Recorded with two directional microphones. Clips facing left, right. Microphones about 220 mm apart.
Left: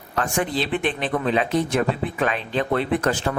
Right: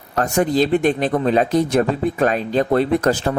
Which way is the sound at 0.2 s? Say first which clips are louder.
Right 7 dB; 40° right (ahead or behind).